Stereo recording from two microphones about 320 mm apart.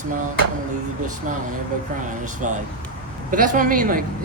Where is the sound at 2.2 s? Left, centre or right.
Right.